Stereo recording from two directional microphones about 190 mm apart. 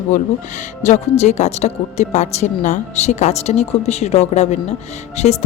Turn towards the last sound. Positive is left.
turn(degrees=35)  # may be behind; listen again after turning